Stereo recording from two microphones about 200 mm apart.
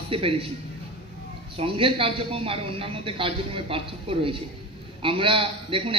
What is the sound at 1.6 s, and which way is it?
A woman's voice, 25° right (ahead or behind).